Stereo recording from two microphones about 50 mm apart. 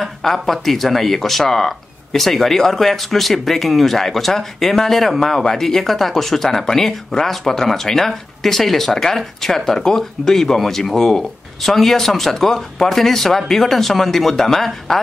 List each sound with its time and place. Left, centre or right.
0.0 s speech: centre